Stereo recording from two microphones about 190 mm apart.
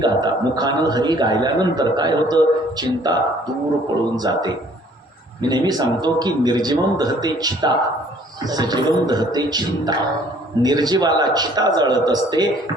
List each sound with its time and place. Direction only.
0.0 s a man's voice: 20° right (ahead or behind)